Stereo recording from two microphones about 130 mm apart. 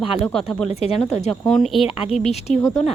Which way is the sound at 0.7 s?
55° left (ahead or behind).